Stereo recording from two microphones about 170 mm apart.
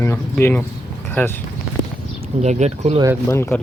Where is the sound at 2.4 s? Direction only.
40° right (ahead or behind).